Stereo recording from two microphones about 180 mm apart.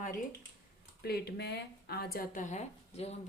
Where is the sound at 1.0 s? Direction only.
65° left (ahead or behind).